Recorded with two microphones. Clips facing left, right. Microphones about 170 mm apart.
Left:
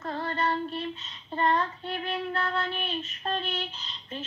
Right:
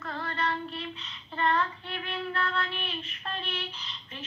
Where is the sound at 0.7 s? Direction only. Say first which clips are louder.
Left 4 dB; 45° left (ahead or behind).